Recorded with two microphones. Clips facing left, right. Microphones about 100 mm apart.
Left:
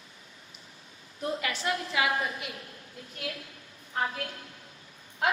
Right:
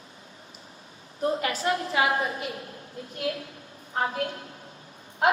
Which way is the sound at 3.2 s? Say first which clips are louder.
Right 8 dB; 30° right (ahead or behind).